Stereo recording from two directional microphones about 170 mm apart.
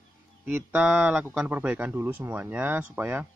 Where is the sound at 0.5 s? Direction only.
10° right (ahead or behind).